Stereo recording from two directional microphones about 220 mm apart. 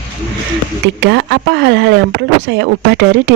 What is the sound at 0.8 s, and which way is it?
Speech, 55° right (ahead or behind).